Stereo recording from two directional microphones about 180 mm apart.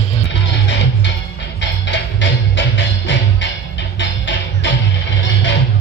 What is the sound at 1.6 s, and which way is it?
Music, 85° left.